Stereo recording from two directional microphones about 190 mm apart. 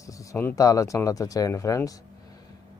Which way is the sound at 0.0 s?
15° left (ahead or behind).